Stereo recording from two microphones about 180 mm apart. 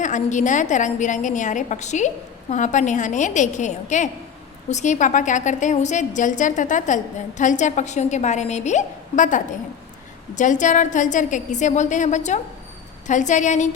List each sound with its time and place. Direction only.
0.0 s a woman's voice: 45° left (ahead or behind)